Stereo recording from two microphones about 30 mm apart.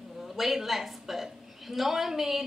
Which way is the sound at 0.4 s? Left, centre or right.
Centre.